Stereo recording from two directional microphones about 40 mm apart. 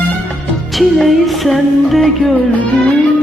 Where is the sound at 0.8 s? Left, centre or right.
Centre.